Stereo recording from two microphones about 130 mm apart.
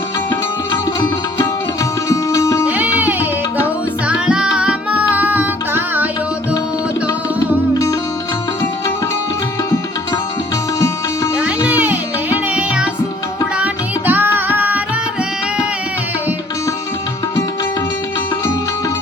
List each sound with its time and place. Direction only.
0.7 s music: 30° left (ahead or behind)
2.6 s music: 15° right (ahead or behind)
10.8 s music: 25° left (ahead or behind)
11.3 s music: 10° right (ahead or behind)
14.1 s music: 15° right (ahead or behind)